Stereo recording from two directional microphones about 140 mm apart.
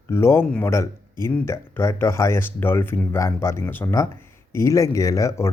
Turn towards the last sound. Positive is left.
turn(degrees=20)  # may be behind; listen again after turning